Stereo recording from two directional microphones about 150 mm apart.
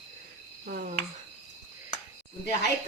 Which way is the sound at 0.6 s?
80° right.